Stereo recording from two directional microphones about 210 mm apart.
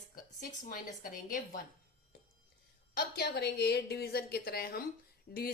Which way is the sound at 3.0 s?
50° left (ahead or behind).